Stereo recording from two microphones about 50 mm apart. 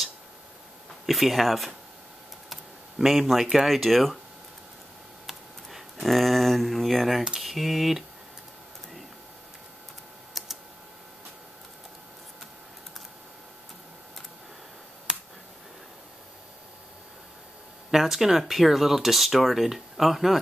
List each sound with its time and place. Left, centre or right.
1.0 s speech: centre
2.5 s a sound: centre
3.4 s speech: centre
5.2 s tick: centre
7.3 s speech: centre
10.4 s computer keyboard: centre
15.1 s finger snapping: centre
17.9 s speech: centre